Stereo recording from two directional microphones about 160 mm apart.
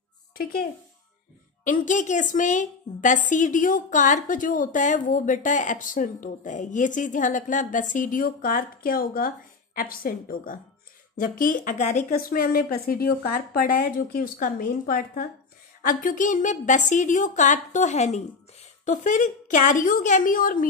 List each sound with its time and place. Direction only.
0.4 s speech: 65° left (ahead or behind)
1.6 s a woman's voice: 55° left (ahead or behind)
12.1 s a woman's voice: 65° left (ahead or behind)